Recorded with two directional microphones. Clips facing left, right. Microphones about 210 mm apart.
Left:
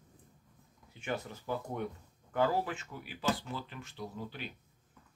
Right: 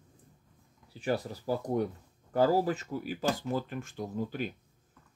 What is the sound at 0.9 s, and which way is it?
Speech, 35° right (ahead or behind).